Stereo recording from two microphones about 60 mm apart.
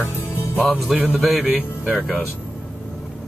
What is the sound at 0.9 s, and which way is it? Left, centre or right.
Speech, centre.